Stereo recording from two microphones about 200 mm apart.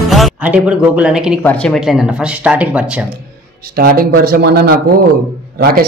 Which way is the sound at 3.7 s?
50° right (ahead or behind).